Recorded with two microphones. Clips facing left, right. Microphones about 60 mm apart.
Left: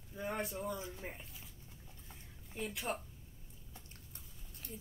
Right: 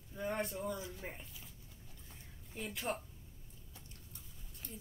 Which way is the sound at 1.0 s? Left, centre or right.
Centre.